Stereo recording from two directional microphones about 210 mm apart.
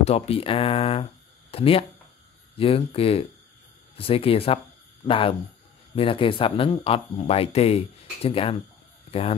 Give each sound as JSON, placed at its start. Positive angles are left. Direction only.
{"t": 0.0, "sound": "speech", "side_deg": 30}